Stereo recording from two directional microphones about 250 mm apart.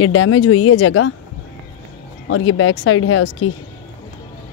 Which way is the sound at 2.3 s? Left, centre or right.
Left.